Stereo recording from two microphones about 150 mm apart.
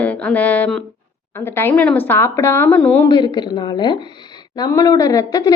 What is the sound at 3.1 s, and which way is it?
A woman's voice, 30° left (ahead or behind).